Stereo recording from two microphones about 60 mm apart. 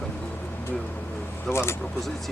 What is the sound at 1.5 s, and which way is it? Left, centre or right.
Speech, left.